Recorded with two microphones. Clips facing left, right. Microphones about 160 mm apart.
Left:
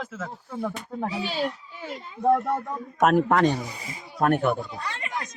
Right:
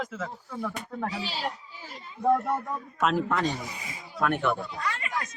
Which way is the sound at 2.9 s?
55° left (ahead or behind).